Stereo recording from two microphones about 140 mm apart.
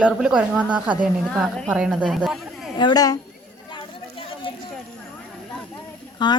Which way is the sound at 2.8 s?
30° left (ahead or behind).